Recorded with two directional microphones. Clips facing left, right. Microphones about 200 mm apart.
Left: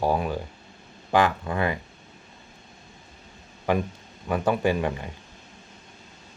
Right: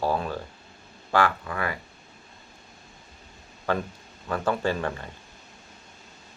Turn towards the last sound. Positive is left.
turn(degrees=15)  # may be behind; listen again after turning